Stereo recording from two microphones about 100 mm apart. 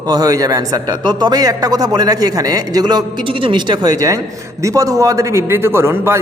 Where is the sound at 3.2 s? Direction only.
60° right (ahead or behind).